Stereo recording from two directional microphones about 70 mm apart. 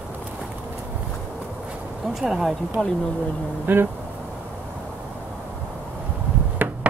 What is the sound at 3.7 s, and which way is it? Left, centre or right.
Speech, right.